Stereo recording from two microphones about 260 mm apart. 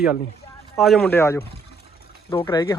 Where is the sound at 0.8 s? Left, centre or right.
Centre.